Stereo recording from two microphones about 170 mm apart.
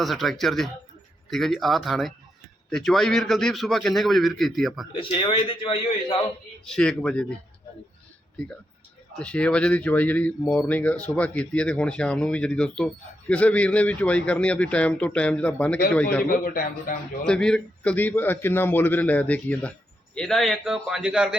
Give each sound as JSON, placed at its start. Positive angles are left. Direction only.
{"t": 0.0, "sound": "a man's voice", "side_deg": 0}
{"t": 4.9, "sound": "a man's voice", "side_deg": 30}
{"t": 6.7, "sound": "a man's voice", "side_deg": 5}
{"t": 9.1, "sound": "speech", "side_deg": 5}
{"t": 16.3, "sound": "a man's voice", "side_deg": 55}
{"t": 17.2, "sound": "a man's voice", "side_deg": 5}